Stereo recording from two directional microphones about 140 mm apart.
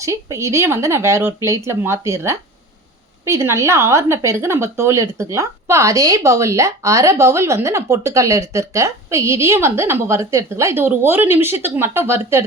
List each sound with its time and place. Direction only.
0.0 s a woman's voice: 20° right (ahead or behind)